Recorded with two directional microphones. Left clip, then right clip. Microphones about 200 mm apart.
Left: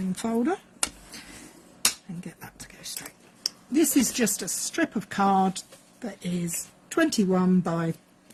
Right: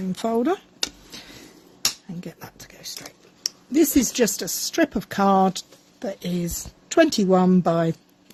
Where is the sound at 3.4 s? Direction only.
45° right (ahead or behind).